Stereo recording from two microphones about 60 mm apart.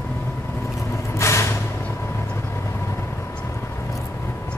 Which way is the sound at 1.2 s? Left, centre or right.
Left.